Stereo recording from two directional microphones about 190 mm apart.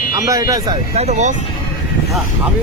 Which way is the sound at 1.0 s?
35° right (ahead or behind).